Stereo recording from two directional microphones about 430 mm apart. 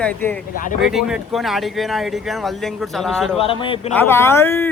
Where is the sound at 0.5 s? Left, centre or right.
Centre.